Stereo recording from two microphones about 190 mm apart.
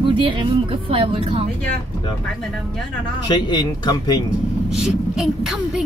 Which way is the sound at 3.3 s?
25° left (ahead or behind).